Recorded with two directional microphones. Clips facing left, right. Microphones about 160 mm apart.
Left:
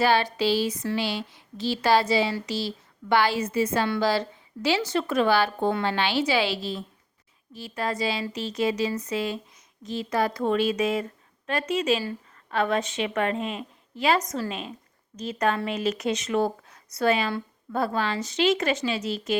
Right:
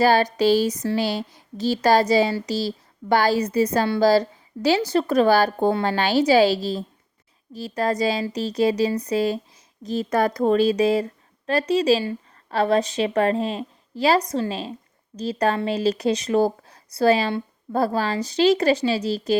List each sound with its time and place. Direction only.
0.0 s a woman's voice: 40° right (ahead or behind)